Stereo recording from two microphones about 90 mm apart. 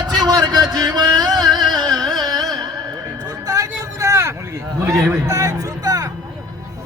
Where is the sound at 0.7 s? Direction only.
50° right (ahead or behind).